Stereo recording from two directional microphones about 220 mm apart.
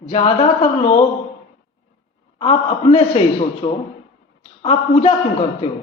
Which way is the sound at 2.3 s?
25° left (ahead or behind).